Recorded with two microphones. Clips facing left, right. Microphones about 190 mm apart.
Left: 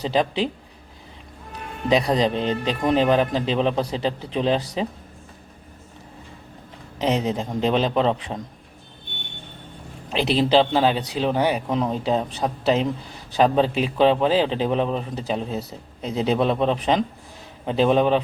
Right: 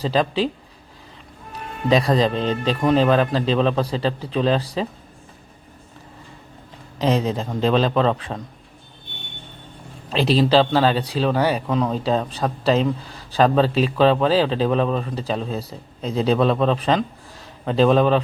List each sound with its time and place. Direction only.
0.0 s speech: 15° left (ahead or behind)
1.9 s speech: 15° left (ahead or behind)
7.0 s speech: 15° left (ahead or behind)
10.1 s speech: 15° left (ahead or behind)